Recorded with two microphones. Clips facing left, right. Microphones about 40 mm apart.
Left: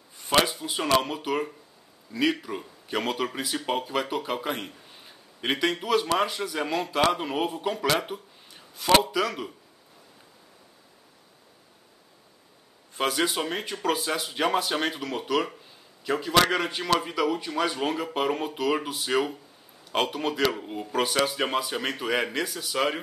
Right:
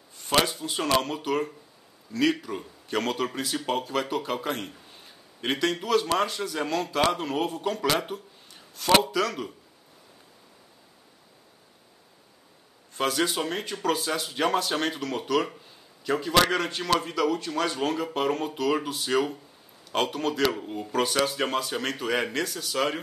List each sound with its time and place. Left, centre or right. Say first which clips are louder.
0.2 s speech: left 1 dB; centre
7.9 s a sound: left 1 dB; centre
9.0 s speech: even; centre
12.9 s speech: even; centre